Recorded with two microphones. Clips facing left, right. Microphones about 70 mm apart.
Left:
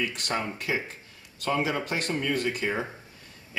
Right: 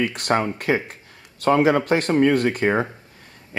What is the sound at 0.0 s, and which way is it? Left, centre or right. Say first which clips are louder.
Speech: right 9 dB; right.